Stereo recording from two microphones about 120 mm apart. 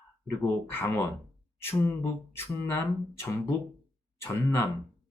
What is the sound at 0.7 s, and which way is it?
Speech, 20° left (ahead or behind).